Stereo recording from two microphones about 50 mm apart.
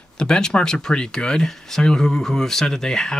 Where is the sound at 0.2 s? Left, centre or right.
Centre.